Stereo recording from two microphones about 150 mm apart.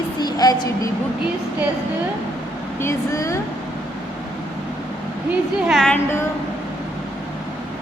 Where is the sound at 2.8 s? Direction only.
20° left (ahead or behind).